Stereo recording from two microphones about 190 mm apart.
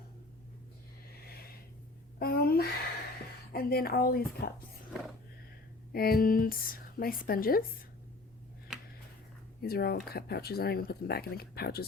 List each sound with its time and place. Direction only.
1.3 s snort: 55° left (ahead or behind)
2.1 s a sound: 55° left (ahead or behind)
3.5 s speech: 50° left (ahead or behind)
5.9 s speech: 55° left (ahead or behind)
8.7 s a sound: 5° right (ahead or behind)
9.6 s speech: 55° left (ahead or behind)